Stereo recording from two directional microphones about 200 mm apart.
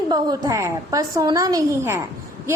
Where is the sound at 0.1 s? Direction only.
20° right (ahead or behind).